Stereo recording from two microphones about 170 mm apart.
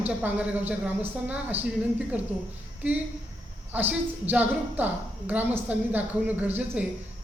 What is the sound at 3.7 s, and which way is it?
A woman's voice, 10° right (ahead or behind).